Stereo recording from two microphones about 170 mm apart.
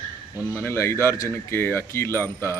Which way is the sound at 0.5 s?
15° left (ahead or behind).